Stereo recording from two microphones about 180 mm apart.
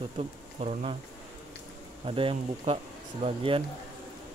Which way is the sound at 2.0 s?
30° right (ahead or behind).